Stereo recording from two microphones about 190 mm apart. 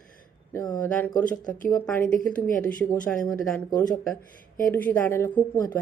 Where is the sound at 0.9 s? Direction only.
10° left (ahead or behind).